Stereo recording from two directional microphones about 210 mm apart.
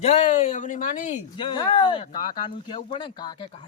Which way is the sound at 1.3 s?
25° left (ahead or behind).